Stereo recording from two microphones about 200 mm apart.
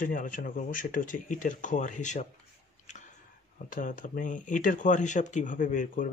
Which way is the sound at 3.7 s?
40° left (ahead or behind).